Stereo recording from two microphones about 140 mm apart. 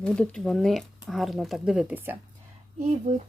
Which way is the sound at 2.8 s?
55° right (ahead or behind).